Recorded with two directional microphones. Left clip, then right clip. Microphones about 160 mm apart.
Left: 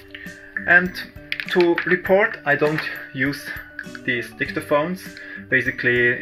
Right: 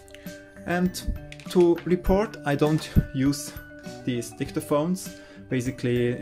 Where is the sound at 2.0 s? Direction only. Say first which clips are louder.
Left 8 dB; 75° right (ahead or behind).